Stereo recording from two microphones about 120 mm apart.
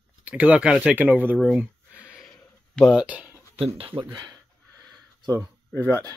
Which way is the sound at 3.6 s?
50° right (ahead or behind).